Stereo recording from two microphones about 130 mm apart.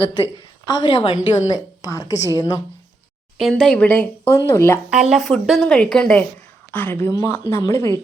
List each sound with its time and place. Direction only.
0.6 s a woman's voice: 35° left (ahead or behind)
3.3 s speech: 5° left (ahead or behind); by 4.8 s 20° left (ahead or behind)
4.9 s a woman's voice: 5° right (ahead or behind); by 7.9 s 25° left (ahead or behind)